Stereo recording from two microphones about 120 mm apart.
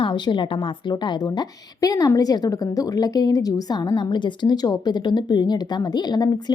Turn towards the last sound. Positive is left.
turn(degrees=35)  # may be behind; listen again after turning